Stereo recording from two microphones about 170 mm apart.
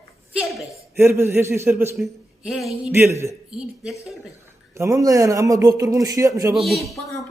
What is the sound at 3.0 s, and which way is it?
Speech, 15° right (ahead or behind).